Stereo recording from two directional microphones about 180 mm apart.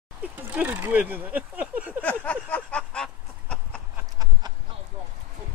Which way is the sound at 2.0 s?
10° left (ahead or behind).